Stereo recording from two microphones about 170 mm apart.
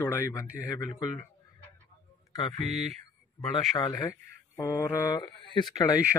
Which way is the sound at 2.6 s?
40° right (ahead or behind).